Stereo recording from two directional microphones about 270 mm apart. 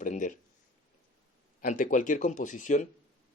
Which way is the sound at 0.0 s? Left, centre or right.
Left.